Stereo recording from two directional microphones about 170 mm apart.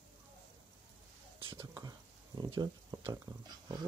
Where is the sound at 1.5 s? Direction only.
20° right (ahead or behind).